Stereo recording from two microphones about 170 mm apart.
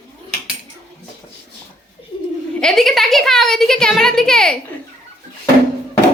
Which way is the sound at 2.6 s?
Centre (ahead or behind).